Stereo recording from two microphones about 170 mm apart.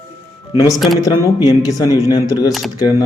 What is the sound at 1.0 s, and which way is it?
Speech, 20° left (ahead or behind).